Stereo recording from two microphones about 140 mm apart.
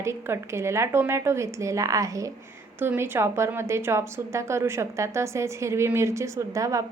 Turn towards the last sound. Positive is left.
turn(degrees=-25)  # may be behind; listen again after turning